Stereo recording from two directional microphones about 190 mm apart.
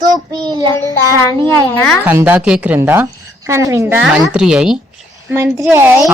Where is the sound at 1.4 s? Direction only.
10° left (ahead or behind).